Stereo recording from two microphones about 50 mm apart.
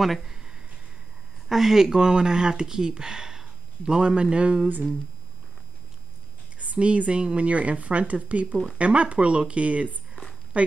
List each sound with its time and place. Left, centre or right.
0.0 s a sound: centre
1.5 s speech: centre; by 4.6 s right
6.6 s a woman's voice: right